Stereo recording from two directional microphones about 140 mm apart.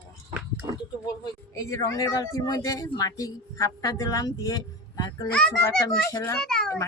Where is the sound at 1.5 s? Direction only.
25° left (ahead or behind).